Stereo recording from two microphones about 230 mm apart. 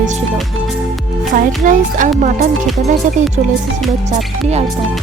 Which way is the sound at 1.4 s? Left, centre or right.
Right.